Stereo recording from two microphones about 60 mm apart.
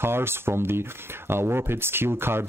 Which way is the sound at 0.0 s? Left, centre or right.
Right.